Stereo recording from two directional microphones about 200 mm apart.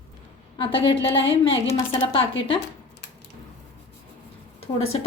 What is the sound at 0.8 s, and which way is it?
Speech, 70° left (ahead or behind).